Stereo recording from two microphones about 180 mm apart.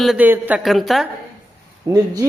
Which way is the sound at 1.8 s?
20° right (ahead or behind).